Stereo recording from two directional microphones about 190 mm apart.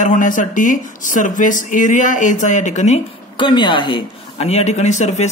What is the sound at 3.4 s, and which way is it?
Speech, 25° left (ahead or behind).